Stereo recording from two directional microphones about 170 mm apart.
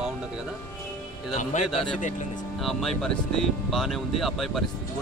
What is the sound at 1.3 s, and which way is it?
Speech, 45° left (ahead or behind).